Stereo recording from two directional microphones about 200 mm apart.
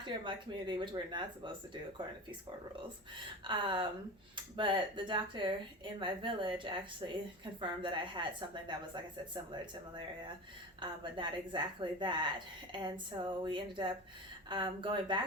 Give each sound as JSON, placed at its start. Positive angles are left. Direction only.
{"t": 0.0, "sound": "a woman's voice", "side_deg": -25}
{"t": 3.4, "sound": "a woman's voice", "side_deg": -25}
{"t": 10.8, "sound": "a woman's voice", "side_deg": -25}